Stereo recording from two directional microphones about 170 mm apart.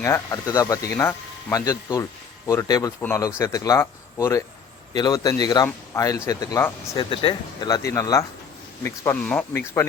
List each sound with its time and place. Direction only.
0.0 s speech: 20° left (ahead or behind)
6.9 s speech: 30° left (ahead or behind)
9.2 s speech: 5° left (ahead or behind)